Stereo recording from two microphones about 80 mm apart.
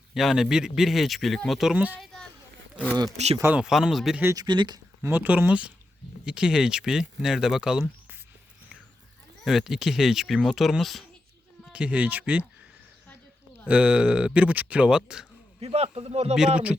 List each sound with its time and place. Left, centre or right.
0.1 s speech: centre
1.7 s speech: centre
2.7 s speech: centre
3.5 s speech: centre
4.4 s speech: right
5.0 s speech: right; by 7.9 s centre
9.4 s speech: centre
11.7 s speech: centre
13.7 s speech: centre
16.3 s speech: centre